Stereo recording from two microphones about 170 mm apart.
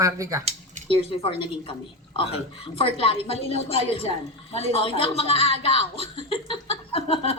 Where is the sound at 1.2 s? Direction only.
30° left (ahead or behind).